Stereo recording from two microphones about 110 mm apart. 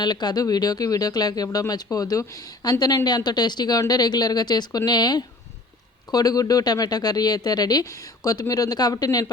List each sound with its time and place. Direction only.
0.0 s speech: 40° left (ahead or behind)